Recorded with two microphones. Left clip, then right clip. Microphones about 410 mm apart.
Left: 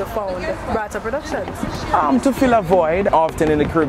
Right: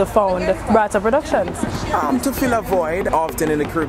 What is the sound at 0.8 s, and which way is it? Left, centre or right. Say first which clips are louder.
Speech: right 7 dB; right.